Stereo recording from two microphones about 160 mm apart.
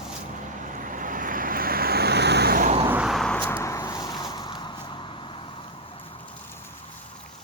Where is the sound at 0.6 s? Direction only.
55° right (ahead or behind); by 2.6 s 80° right.